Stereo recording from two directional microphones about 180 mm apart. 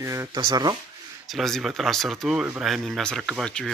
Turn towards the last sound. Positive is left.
turn(degrees=5)  # may be behind; listen again after turning